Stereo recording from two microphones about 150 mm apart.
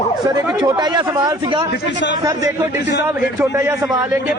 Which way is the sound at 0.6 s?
30° right (ahead or behind).